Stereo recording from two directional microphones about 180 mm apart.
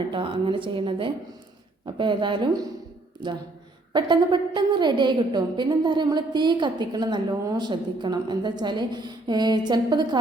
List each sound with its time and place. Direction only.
0.1 s a woman's voice: 25° right (ahead or behind)
3.9 s a woman's voice: 25° right (ahead or behind)